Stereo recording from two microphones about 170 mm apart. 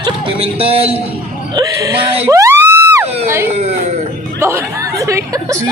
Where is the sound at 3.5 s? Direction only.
40° right (ahead or behind).